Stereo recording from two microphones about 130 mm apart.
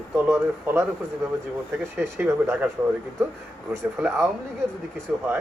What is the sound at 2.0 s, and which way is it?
Speech, 20° right (ahead or behind).